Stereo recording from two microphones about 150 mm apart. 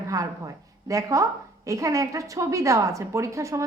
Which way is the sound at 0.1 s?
20° right (ahead or behind).